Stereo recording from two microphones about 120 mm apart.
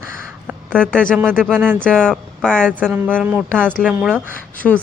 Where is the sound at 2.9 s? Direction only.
15° right (ahead or behind).